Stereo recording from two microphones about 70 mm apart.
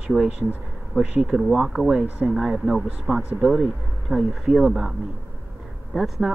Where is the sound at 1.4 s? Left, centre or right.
Centre.